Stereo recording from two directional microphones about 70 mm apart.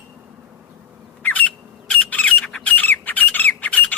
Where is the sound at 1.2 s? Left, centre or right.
Left.